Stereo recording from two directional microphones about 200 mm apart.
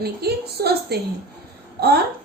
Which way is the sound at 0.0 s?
50° right (ahead or behind).